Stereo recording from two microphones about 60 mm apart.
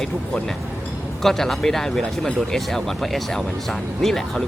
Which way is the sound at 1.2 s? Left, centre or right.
Centre.